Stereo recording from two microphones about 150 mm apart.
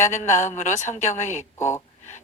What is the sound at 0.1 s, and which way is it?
A woman's voice, 50° left (ahead or behind).